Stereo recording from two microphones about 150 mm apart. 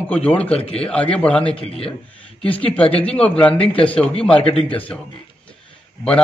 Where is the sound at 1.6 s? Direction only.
40° left (ahead or behind).